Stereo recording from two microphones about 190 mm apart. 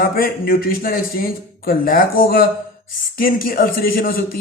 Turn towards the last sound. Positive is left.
turn(degrees=50)  # may be behind; listen again after turning